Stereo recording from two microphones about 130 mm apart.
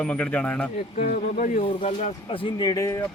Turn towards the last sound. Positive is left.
turn(degrees=25)  # may be behind; listen again after turning